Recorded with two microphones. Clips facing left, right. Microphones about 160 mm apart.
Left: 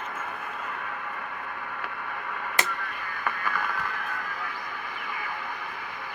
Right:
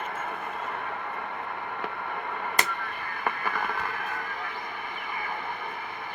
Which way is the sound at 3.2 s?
25° right (ahead or behind).